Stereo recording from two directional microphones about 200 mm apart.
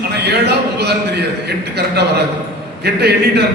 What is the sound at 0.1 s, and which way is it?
A man's voice, 55° right (ahead or behind).